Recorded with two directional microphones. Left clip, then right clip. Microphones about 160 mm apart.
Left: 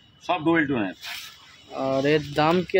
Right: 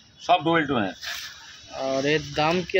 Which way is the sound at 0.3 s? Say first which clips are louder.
Right 2 dB; 40° right (ahead or behind).